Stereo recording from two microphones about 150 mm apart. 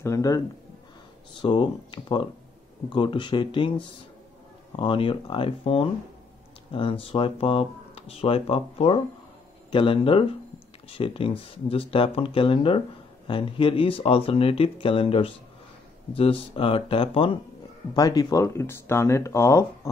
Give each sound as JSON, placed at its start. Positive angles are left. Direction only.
{"t": 0.0, "sound": "speech", "side_deg": 20}
{"t": 1.4, "sound": "speech", "side_deg": 35}
{"t": 4.7, "sound": "speech", "side_deg": 35}
{"t": 17.9, "sound": "speech", "side_deg": 25}